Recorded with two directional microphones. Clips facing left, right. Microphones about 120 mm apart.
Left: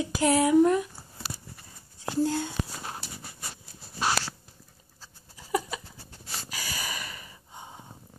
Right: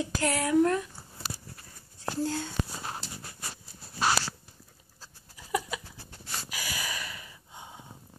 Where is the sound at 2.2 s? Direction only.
5° left (ahead or behind).